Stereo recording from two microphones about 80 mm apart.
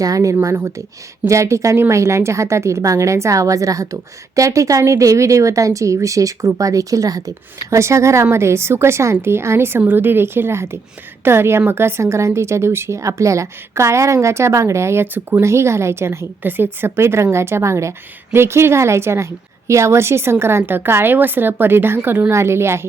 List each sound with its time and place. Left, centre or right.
0.0 s speech: right